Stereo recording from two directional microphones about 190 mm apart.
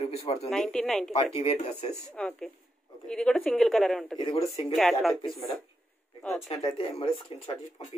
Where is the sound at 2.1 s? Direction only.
5° left (ahead or behind).